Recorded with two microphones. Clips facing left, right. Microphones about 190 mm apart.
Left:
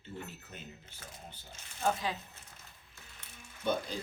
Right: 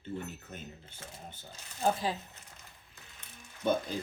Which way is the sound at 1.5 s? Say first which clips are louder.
Right 2 dB; 35° right (ahead or behind).